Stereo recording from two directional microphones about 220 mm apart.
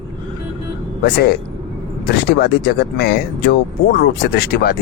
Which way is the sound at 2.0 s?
45° left (ahead or behind).